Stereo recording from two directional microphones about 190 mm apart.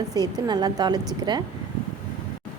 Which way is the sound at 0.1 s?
20° right (ahead or behind).